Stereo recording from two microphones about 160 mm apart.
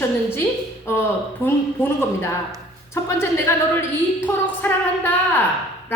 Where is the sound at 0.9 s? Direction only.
15° left (ahead or behind).